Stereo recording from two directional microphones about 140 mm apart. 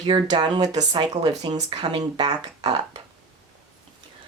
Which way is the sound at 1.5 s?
45° right (ahead or behind).